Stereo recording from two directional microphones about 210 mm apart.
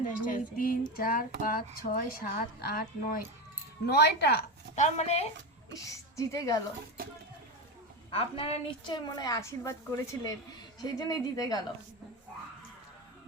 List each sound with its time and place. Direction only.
0.3 s speech: 40° left (ahead or behind)
4.7 s speech: 35° left (ahead or behind)
5.7 s a woman's voice: 15° left (ahead or behind)
7.0 s speech: 45° right (ahead or behind)
8.1 s a woman's voice: 25° left (ahead or behind)